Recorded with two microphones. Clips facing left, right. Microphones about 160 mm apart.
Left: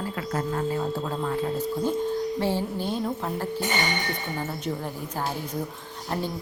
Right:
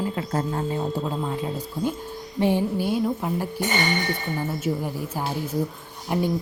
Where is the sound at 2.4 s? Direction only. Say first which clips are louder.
Right 4 dB; 15° right (ahead or behind).